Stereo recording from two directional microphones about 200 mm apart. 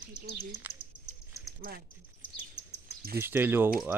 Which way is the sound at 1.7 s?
50° right (ahead or behind).